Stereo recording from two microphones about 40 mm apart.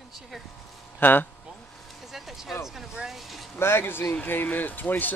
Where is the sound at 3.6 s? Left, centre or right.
Left.